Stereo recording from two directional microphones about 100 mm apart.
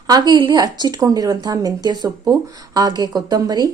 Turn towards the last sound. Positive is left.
turn(degrees=-40)  # may be behind; listen again after turning